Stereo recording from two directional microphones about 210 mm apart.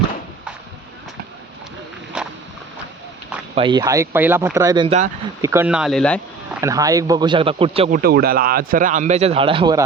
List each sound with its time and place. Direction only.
3.5 s speech: 25° right (ahead or behind); by 6.6 s 5° left (ahead or behind)
6.6 s speech: 15° right (ahead or behind)
7.9 s speech: 45° right (ahead or behind); by 9.8 s 20° right (ahead or behind)